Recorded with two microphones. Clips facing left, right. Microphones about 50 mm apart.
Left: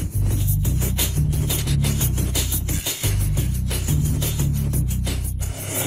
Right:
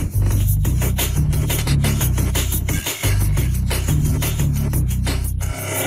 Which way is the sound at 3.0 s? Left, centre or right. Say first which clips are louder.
Right 2 dB; right.